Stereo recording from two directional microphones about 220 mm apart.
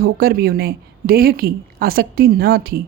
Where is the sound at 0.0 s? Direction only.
45° right (ahead or behind).